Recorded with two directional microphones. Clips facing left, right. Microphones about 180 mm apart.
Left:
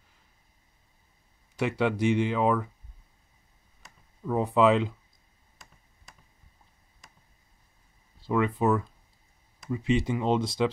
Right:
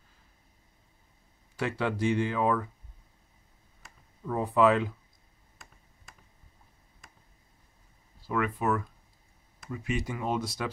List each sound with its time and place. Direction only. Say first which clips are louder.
1.6 s speech: left 3 dB; 20° left (ahead or behind)
4.3 s speech: left 2 dB; 20° left (ahead or behind)
8.3 s speech: left 4 dB; 25° left (ahead or behind)